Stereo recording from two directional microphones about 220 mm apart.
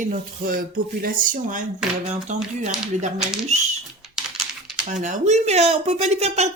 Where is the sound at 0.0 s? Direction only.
40° right (ahead or behind).